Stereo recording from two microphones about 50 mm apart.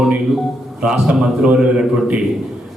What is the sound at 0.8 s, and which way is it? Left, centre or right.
Speech, centre.